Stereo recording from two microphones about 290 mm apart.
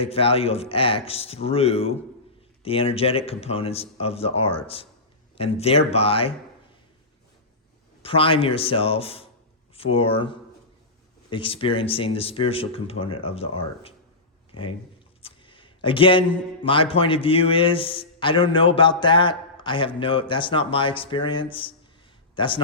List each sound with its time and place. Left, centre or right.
0.0 s speech: centre
8.0 s speech: centre
15.2 s a sound: centre
16.6 s a man's voice: centre